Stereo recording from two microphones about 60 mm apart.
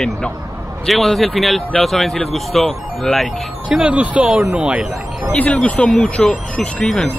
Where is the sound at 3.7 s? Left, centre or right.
Centre.